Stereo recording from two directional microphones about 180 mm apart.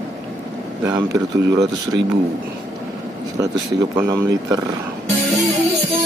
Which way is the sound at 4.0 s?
20° right (ahead or behind).